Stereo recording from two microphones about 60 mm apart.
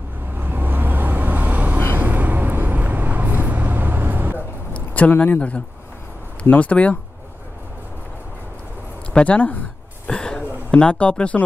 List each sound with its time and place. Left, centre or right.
0.4 s vehicle: right
4.7 s a sound: left
5.1 s speech: left
6.6 s speech: left
9.1 s speech: left
10.0 s a sound: centre